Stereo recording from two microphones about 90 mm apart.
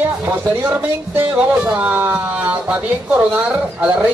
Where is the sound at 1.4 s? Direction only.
10° right (ahead or behind).